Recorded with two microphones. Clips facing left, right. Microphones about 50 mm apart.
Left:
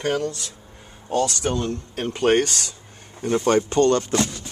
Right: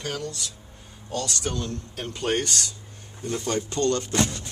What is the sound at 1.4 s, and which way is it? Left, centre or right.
Speech, left.